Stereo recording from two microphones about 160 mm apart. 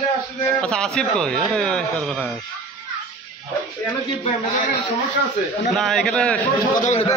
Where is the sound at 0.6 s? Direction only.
5° left (ahead or behind).